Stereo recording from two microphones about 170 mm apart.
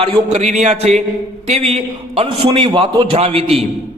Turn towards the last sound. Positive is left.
turn(degrees=-35)  # may be behind; listen again after turning